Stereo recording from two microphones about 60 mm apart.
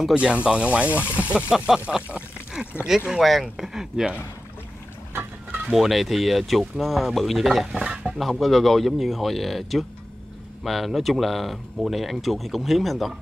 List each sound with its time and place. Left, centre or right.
0.1 s speech: centre
2.0 s pour: centre
3.1 s speech: centre
5.7 s speech: centre
8.2 s speech: centre